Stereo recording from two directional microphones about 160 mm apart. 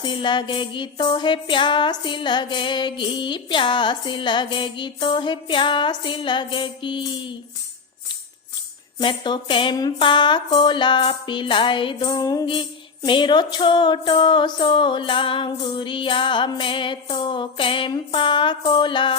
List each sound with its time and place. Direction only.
0.0 s music: 30° left (ahead or behind)
9.0 s speech: 30° left (ahead or behind)